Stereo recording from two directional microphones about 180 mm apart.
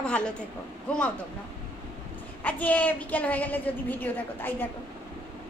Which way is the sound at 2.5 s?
10° left (ahead or behind).